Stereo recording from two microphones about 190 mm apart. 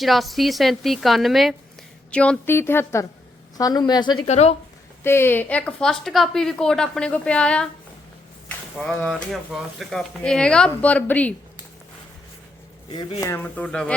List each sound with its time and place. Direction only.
0.0 s a woman's voice: centre (ahead or behind); by 4.2 s 20° left (ahead or behind)
4.3 s a woman's voice: 35° left (ahead or behind)
5.0 s speech: 10° left (ahead or behind)
12.9 s a woman's voice: 25° left (ahead or behind); by 13.9 s 5° left (ahead or behind)